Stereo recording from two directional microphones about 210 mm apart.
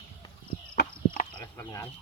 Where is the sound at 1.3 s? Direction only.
10° left (ahead or behind).